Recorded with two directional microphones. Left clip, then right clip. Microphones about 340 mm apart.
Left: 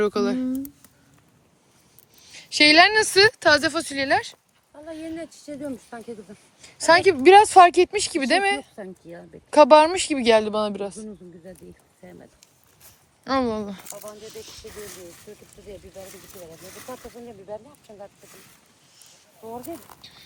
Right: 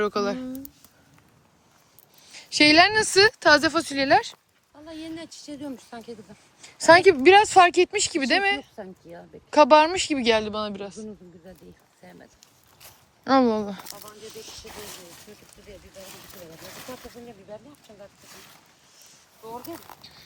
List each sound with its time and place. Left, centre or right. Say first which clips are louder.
0.0 s speech: left 2 dB; centre
2.3 s speech: left 2 dB; centre
5.1 s speech: left 3 dB; left
6.6 s speech: right 2 dB; centre
8.7 s speech: left 2 dB; left
9.5 s speech: left 3 dB; centre
13.2 s speech: right 4 dB; centre
20.0 s speech: left 1 dB; centre